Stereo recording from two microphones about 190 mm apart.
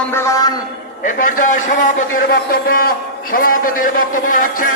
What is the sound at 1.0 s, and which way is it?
A man's voice, 45° left (ahead or behind).